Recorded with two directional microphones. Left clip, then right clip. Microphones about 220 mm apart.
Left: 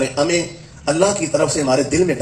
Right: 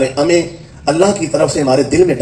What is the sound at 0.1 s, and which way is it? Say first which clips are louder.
A man's voice: right 5 dB; 30° right (ahead or behind).